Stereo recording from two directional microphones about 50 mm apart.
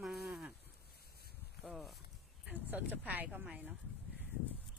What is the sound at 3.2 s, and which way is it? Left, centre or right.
Speech, centre.